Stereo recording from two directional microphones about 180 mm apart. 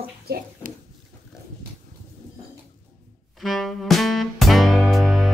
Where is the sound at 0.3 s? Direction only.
50° right (ahead or behind).